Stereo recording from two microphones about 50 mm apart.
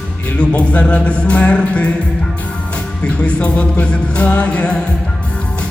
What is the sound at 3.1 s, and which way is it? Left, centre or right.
Music, left.